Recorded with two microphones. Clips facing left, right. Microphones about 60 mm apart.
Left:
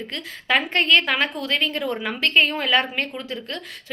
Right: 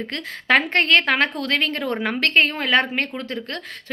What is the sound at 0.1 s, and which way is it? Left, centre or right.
A woman's voice, right.